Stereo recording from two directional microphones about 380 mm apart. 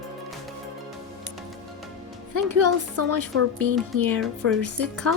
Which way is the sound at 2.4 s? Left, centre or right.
Right.